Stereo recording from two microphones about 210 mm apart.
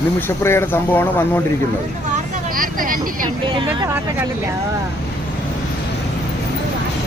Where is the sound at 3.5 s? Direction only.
25° right (ahead or behind).